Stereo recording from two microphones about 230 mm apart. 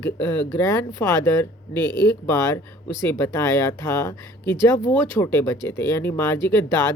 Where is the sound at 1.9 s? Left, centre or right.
Centre.